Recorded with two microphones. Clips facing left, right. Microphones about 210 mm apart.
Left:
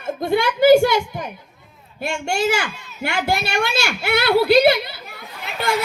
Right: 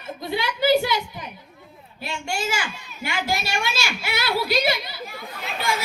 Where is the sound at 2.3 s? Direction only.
65° left (ahead or behind).